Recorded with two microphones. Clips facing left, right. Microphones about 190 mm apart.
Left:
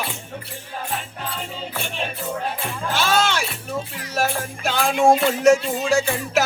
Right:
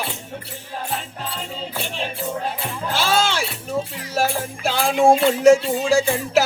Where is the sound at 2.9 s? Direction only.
30° right (ahead or behind).